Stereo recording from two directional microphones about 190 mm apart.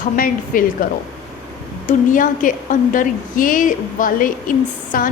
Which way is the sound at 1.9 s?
45° left (ahead or behind).